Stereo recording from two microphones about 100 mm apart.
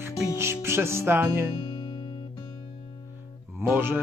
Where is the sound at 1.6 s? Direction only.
55° left (ahead or behind).